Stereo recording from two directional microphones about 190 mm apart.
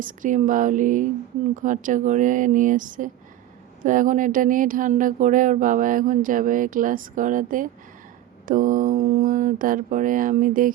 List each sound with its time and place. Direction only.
0.0 s speech: 45° right (ahead or behind)